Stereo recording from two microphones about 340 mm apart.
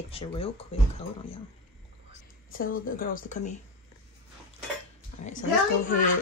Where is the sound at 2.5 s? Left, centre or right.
Left.